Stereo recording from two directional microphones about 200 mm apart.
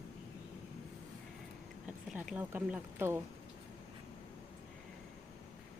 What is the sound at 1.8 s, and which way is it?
Speech, 5° right (ahead or behind).